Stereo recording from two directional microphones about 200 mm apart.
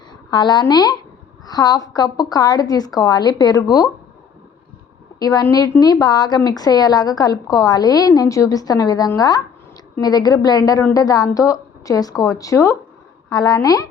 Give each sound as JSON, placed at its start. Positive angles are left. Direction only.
{"t": 0.3, "sound": "a woman's voice", "side_deg": 20}
{"t": 5.2, "sound": "a woman's voice", "side_deg": 20}